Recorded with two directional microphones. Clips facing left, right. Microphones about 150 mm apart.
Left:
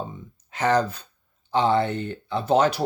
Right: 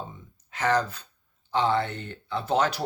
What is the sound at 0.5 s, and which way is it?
Speech, 20° left (ahead or behind).